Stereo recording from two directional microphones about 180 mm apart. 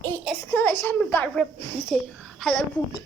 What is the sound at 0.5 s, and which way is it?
A child's voice, 10° left (ahead or behind).